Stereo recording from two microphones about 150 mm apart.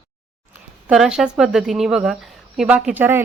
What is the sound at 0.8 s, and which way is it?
A woman's voice, 5° right (ahead or behind).